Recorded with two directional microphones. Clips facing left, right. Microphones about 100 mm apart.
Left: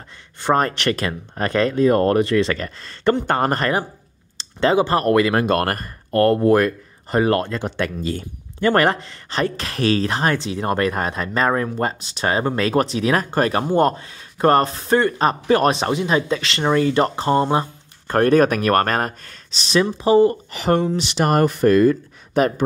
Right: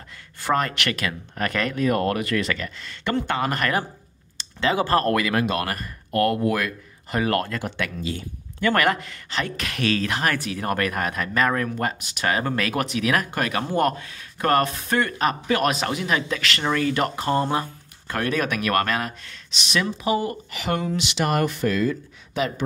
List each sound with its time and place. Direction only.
0.4 s speech: 30° left (ahead or behind)
4.4 s a sound: 35° left (ahead or behind)
4.7 s speech: 20° left (ahead or behind)
5.2 s speech: 35° left (ahead or behind)
5.5 s speech: 50° left (ahead or behind)
8.5 s speech: 30° left (ahead or behind)
18.0 s speech: 45° left (ahead or behind)